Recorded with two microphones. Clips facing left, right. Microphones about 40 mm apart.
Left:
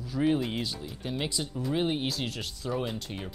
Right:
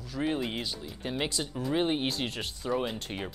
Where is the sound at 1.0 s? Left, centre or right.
Centre.